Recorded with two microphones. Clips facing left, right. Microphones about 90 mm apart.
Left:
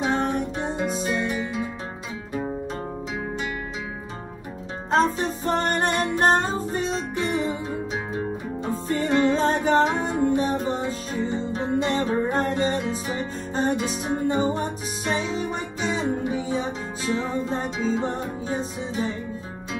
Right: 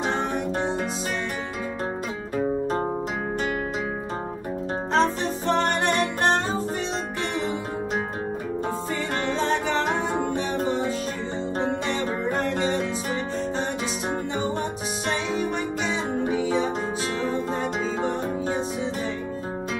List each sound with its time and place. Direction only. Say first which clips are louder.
4.9 s music: left 2 dB; 40° left (ahead or behind)
9.0 s music: left 7 dB; 40° left (ahead or behind)
9.8 s music: even; 40° right (ahead or behind)
10.3 s music: left 4 dB; 40° left (ahead or behind)
11.8 s music: left 3 dB; 40° left (ahead or behind)
13.8 s music: left 1 dB; 50° right (ahead or behind)
14.2 s music: left 5 dB; 40° left (ahead or behind)